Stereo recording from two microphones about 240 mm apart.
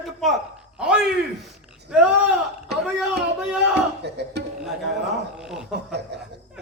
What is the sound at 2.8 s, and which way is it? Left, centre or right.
A man's voice, centre.